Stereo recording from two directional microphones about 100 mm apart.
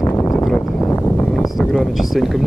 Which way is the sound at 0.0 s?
30° left (ahead or behind).